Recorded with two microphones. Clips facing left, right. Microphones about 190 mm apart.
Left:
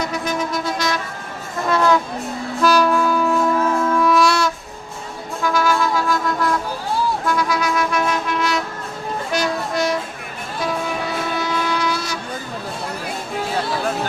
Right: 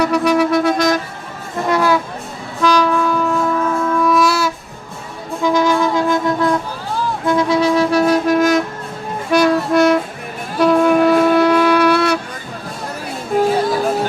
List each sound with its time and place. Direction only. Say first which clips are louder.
0.0 s music: right 9 dB; 65° right (ahead or behind)
1.7 s music: right 1 dB; 10° right (ahead or behind)
2.6 s wind instrument: right 1 dB; 5° left (ahead or behind)
5.4 s music: right 4 dB; 20° right (ahead or behind); by 8.6 s 45° right (ahead or behind)
9.3 s music: right 10 dB; 60° right (ahead or behind)
10.6 s wind instrument: right 12 dB; 60° right (ahead or behind)